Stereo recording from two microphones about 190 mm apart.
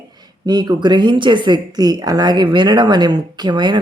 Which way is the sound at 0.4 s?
20° right (ahead or behind).